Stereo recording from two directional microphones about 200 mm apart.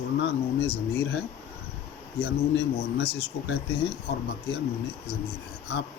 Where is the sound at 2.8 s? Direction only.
50° left (ahead or behind).